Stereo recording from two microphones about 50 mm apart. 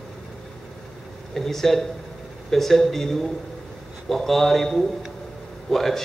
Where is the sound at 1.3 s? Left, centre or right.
Centre.